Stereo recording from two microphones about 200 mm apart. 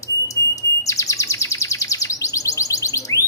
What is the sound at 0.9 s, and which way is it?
Bird, 15° left (ahead or behind).